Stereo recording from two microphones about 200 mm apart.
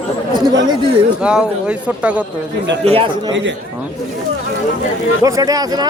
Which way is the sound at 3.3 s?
65° right (ahead or behind).